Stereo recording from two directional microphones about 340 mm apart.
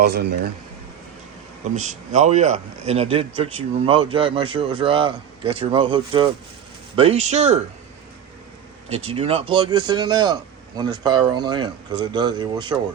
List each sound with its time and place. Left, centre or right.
0.0 s speech: right
1.7 s a man's voice: right
9.0 s a man's voice: centre